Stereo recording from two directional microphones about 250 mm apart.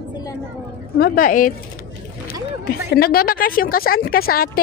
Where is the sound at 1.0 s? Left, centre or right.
Left.